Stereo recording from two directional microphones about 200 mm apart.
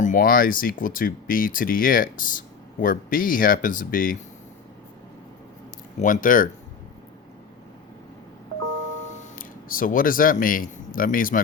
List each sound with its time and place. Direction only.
0.0 s speech: 40° left (ahead or behind)
6.0 s speech: 40° left (ahead or behind)
9.0 s speech: 40° left (ahead or behind)